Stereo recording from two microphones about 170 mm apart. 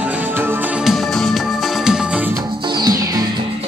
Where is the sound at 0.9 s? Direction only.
Centre (ahead or behind).